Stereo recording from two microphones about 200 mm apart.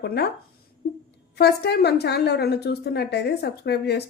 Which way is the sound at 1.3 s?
55° left (ahead or behind).